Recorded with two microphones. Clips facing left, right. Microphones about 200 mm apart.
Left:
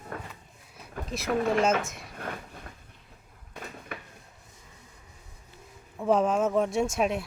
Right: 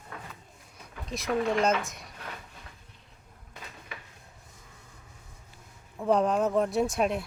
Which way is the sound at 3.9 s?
55° left (ahead or behind).